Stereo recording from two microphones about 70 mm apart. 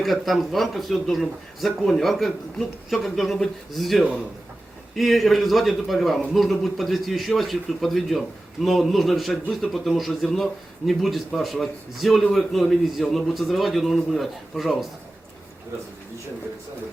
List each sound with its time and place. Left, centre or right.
0.0 s speech: centre